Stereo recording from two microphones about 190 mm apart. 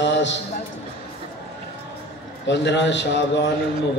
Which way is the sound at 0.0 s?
70° left (ahead or behind).